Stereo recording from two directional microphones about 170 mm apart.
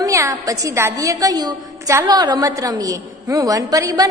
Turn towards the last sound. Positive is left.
turn(degrees=-20)  # may be behind; listen again after turning